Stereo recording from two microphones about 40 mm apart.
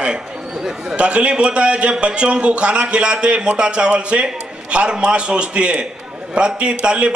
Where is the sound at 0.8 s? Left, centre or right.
Right.